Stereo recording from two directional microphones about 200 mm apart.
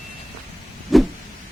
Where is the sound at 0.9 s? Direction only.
Centre (ahead or behind).